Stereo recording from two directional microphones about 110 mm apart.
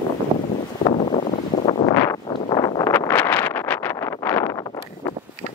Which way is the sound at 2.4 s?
40° left (ahead or behind).